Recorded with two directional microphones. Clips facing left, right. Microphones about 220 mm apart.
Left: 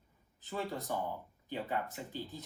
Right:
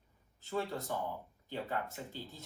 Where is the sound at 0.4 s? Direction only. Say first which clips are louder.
Right 1 dB; 15° left (ahead or behind).